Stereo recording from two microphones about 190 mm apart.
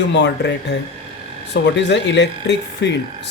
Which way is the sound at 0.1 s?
65° left (ahead or behind).